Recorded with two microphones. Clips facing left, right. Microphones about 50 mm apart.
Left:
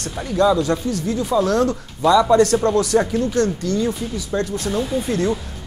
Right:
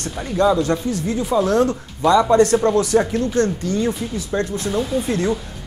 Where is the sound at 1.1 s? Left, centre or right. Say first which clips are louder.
Even; centre.